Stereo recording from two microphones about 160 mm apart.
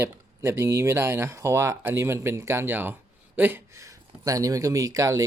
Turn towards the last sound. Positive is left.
turn(degrees=-20)  # may be behind; listen again after turning